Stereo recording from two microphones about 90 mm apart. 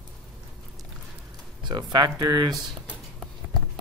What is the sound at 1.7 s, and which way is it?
Speech, 50° right (ahead or behind).